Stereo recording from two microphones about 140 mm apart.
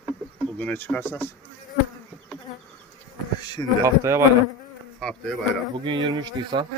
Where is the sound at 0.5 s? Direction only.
15° left (ahead or behind).